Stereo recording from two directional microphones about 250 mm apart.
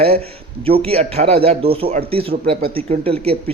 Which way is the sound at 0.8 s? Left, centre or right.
Right.